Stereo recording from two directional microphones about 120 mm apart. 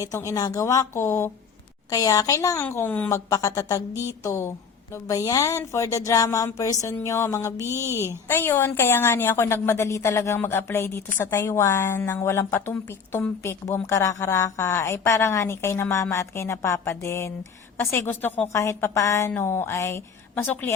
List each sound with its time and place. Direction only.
0.0 s a woman's voice: 30° left (ahead or behind)
2.6 s a woman's voice: 15° left (ahead or behind)
3.1 s a woman's voice: 25° left (ahead or behind)